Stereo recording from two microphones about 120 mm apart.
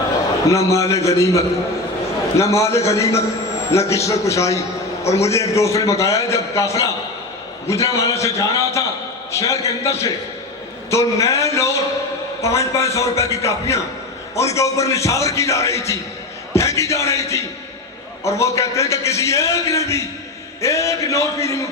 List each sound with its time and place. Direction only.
0.4 s a man's voice: 25° left (ahead or behind)